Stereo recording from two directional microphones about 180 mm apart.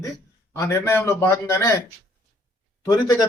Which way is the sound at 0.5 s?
15° left (ahead or behind).